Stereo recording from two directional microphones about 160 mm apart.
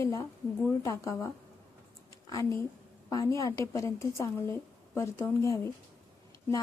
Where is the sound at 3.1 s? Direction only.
20° left (ahead or behind).